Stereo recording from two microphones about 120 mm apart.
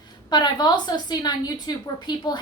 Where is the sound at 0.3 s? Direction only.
35° left (ahead or behind).